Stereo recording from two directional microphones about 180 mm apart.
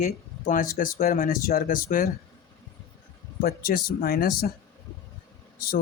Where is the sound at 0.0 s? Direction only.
40° left (ahead or behind).